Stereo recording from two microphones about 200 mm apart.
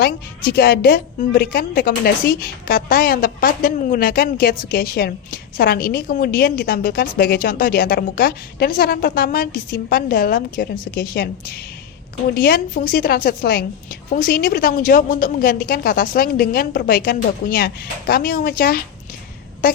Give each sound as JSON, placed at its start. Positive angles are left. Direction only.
{"t": 0.0, "sound": "a woman's voice", "side_deg": 50}
{"t": 12.3, "sound": "a woman's voice", "side_deg": 50}